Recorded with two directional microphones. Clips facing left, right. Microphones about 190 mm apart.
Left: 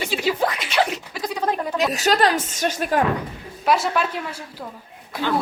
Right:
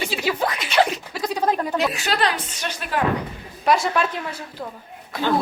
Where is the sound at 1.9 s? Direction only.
40° left (ahead or behind).